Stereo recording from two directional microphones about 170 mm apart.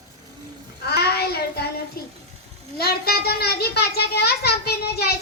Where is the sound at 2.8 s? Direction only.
65° left (ahead or behind).